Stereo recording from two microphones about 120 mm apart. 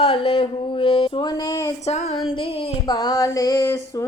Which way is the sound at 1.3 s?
35° left (ahead or behind).